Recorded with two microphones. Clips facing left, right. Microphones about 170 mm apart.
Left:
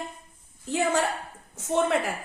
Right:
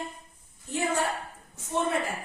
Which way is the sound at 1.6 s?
90° left.